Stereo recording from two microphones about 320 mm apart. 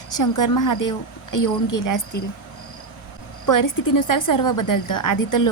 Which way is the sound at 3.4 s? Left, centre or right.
Left.